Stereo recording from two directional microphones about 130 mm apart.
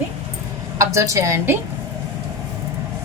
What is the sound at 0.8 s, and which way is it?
Speech, 25° right (ahead or behind).